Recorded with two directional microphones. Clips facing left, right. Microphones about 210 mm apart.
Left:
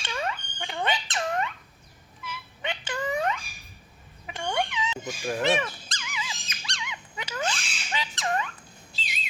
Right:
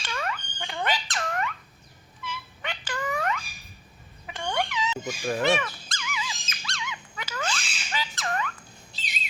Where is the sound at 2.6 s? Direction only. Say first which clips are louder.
Left 2 dB; 20° left (ahead or behind).